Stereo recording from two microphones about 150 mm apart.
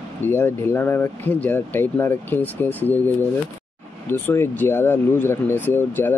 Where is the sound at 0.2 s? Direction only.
15° left (ahead or behind).